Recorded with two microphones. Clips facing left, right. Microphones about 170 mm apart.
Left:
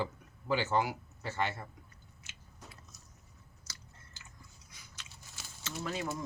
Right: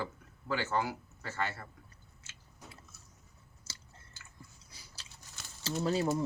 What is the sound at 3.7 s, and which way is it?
Chewing, 30° right (ahead or behind).